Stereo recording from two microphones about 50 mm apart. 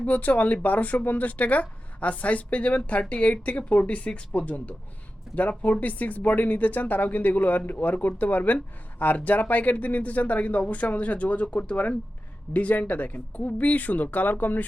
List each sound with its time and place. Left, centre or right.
0.0 s speech: left